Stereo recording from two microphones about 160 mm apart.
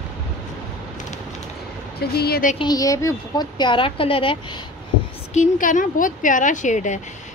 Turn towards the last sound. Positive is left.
turn(degrees=50)  # may be behind; listen again after turning